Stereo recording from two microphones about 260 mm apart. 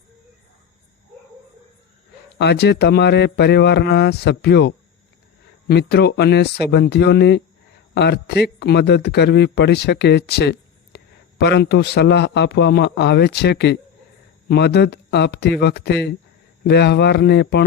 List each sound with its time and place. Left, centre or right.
2.4 s speech: left